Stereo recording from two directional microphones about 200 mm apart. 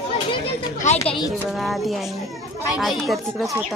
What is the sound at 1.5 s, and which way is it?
Speech, centre (ahead or behind).